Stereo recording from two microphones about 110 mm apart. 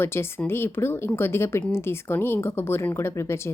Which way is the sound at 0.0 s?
20° left (ahead or behind).